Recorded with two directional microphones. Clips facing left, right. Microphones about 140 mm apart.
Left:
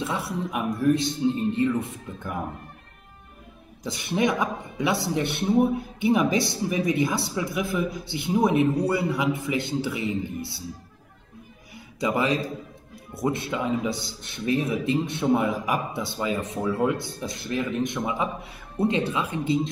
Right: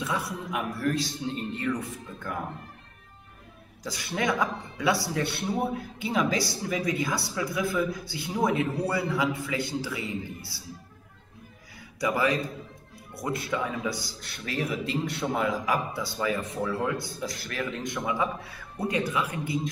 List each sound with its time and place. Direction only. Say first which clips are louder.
0.0 s a man's voice: left 3 dB; 25° left (ahead or behind)
3.8 s a man's voice: left 5 dB; 20° left (ahead or behind)
11.7 s music: left 3 dB; 20° left (ahead or behind)
13.1 s a man's voice: left 4 dB; 25° left (ahead or behind)